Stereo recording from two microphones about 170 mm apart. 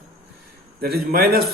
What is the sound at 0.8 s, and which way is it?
Speech, 65° right (ahead or behind).